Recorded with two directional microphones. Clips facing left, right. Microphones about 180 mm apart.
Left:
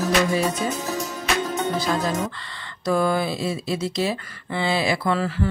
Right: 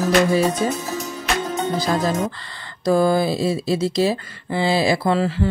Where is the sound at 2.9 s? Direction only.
35° right (ahead or behind).